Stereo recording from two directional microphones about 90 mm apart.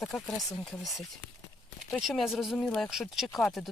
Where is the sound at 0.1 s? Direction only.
5° left (ahead or behind).